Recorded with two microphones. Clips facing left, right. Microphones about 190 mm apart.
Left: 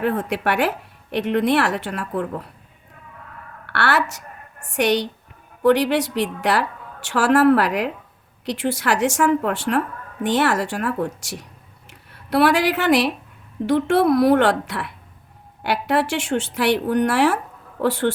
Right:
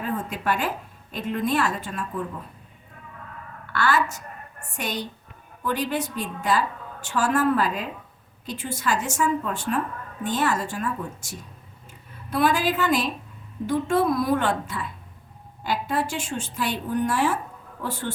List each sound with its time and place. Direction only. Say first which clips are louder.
0.0 s a woman's voice: left 6 dB; 75° left (ahead or behind)
3.7 s a woman's voice: left 2 dB; 75° left (ahead or behind)